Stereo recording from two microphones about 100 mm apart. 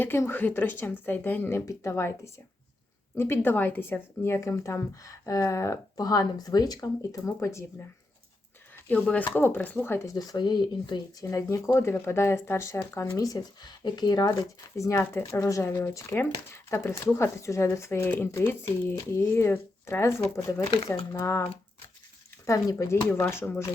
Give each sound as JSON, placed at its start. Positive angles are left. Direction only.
{"t": 0.0, "sound": "speech", "side_deg": 25}
{"t": 8.7, "sound": "speech", "side_deg": 15}
{"t": 11.2, "sound": "speech", "side_deg": 35}
{"t": 13.1, "sound": "speech", "side_deg": 40}
{"t": 22.4, "sound": "speech", "side_deg": 35}